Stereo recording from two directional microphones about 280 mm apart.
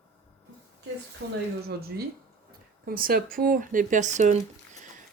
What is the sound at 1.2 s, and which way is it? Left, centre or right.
Speech, right.